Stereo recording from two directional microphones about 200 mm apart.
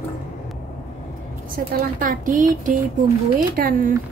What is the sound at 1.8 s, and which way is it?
Speech, 45° right (ahead or behind).